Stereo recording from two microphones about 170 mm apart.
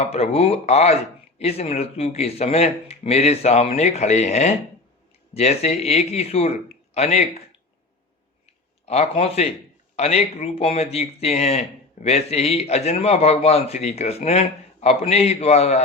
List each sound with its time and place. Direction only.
0.0 s a man's voice: 35° left (ahead or behind)
8.9 s a man's voice: 40° left (ahead or behind)